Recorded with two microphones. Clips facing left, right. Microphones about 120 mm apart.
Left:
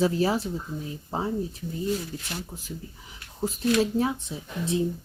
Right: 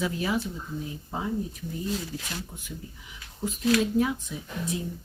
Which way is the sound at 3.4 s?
35° left (ahead or behind).